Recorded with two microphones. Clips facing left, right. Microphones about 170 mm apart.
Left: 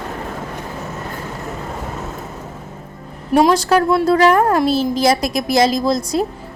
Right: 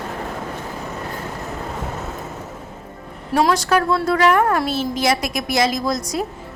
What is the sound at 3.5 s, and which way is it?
A woman's voice, 35° left (ahead or behind).